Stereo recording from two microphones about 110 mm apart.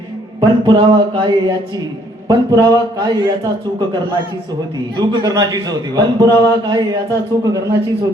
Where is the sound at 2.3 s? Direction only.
35° right (ahead or behind).